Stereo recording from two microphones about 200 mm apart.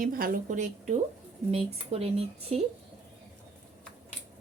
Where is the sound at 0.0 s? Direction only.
45° right (ahead or behind).